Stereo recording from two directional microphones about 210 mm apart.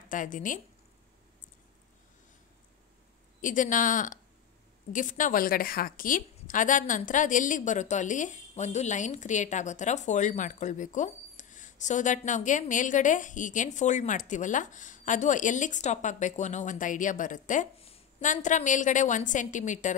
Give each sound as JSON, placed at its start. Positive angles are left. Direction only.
{"t": 0.1, "sound": "a woman's voice", "side_deg": 40}
{"t": 3.3, "sound": "a woman's voice", "side_deg": 40}